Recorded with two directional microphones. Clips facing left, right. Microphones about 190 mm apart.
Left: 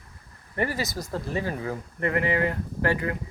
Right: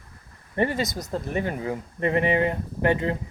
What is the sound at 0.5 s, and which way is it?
Speech, 25° right (ahead or behind).